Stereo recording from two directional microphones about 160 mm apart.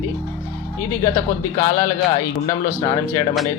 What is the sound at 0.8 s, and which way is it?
A man's voice, 20° left (ahead or behind).